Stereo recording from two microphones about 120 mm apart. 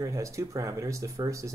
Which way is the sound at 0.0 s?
25° right (ahead or behind).